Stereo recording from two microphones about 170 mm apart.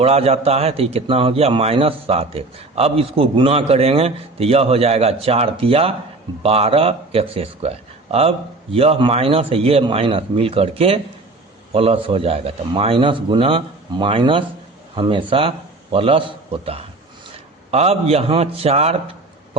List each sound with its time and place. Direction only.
0.0 s a man's voice: 40° right (ahead or behind)
8.7 s a man's voice: 35° right (ahead or behind)